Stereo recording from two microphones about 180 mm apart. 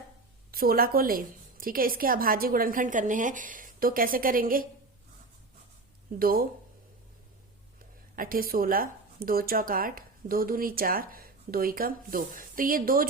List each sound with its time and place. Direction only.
0.5 s speech: 55° right (ahead or behind)
6.1 s speech: 55° right (ahead or behind)
8.1 s speech: 50° right (ahead or behind)